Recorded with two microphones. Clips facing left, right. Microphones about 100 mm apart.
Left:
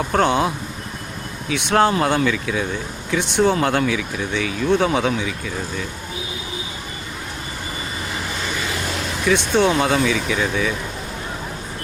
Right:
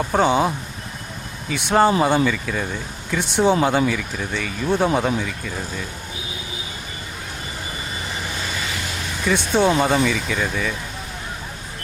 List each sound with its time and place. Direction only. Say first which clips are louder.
0.1 s speech: even; 5° right (ahead or behind)
3.3 s speech: even; 15° right (ahead or behind)
3.6 s speech: even; 5° right (ahead or behind)
9.2 s speech: left 1 dB; centre (ahead or behind)